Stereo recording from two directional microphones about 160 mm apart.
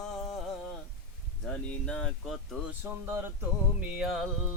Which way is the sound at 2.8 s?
10° right (ahead or behind).